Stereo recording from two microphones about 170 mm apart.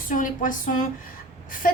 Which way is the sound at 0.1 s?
50° left (ahead or behind).